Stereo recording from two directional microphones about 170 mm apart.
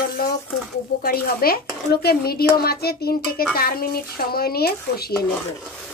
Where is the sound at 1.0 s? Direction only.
60° left (ahead or behind).